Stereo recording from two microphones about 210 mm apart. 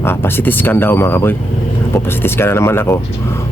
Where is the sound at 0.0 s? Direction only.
10° left (ahead or behind).